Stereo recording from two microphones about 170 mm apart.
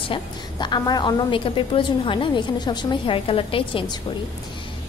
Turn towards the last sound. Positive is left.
turn(degrees=30)  # may be behind; listen again after turning